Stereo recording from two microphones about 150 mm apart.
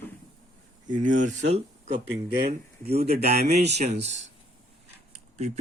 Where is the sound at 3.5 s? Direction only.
45° right (ahead or behind).